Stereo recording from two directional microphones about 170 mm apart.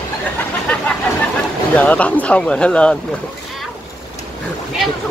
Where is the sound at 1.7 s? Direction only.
10° left (ahead or behind).